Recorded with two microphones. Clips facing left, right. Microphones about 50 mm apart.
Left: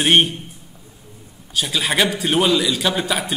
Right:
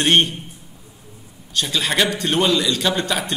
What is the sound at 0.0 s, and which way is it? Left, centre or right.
Speech, centre.